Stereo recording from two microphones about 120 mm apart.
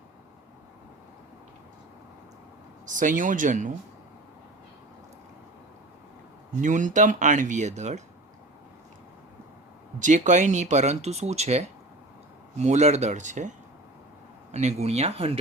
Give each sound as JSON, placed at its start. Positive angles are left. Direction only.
{"t": 2.9, "sound": "speech", "side_deg": -90}
{"t": 6.6, "sound": "speech", "side_deg": -90}
{"t": 10.0, "sound": "speech", "side_deg": -90}
{"t": 14.5, "sound": "speech", "side_deg": -70}